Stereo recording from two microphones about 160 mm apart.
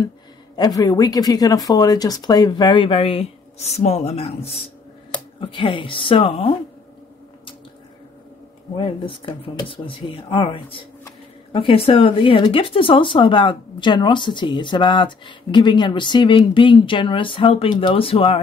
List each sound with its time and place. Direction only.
0.6 s speech: 25° left (ahead or behind)
8.7 s speech: 30° left (ahead or behind)